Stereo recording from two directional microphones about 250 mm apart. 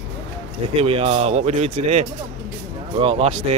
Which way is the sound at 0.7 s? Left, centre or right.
Right.